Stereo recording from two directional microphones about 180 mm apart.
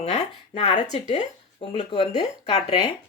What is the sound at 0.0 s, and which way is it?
Speech, 35° left (ahead or behind).